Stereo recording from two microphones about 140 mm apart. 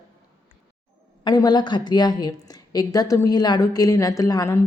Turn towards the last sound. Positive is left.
turn(degrees=25)  # may be behind; listen again after turning